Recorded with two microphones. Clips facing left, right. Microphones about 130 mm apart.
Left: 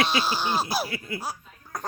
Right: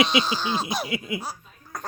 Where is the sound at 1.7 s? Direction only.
Centre (ahead or behind).